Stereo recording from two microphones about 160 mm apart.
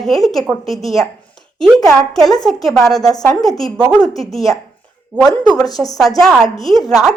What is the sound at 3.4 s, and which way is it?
A woman's voice, centre (ahead or behind).